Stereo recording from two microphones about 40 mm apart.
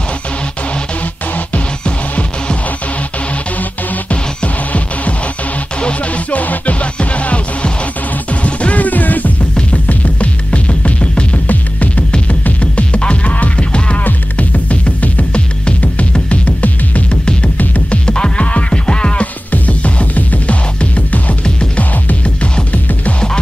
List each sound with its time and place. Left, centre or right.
1.9 s music: left
3.9 s music: left
17.1 s music: left
19.5 s music: left